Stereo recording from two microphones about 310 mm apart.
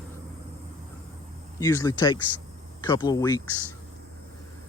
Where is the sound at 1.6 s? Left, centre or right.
Centre.